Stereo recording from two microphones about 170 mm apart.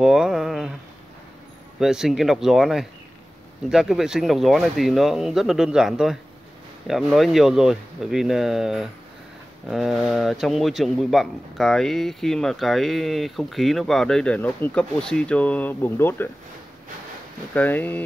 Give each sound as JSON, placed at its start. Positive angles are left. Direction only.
{"t": 0.0, "sound": "a sound", "side_deg": 0}
{"t": 1.8, "sound": "speech", "side_deg": -5}
{"t": 17.6, "sound": "speech", "side_deg": 10}